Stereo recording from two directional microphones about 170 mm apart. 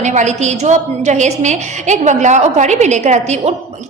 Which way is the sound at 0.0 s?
45° right (ahead or behind).